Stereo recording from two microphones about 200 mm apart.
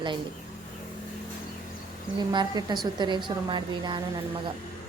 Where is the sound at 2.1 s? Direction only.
20° right (ahead or behind).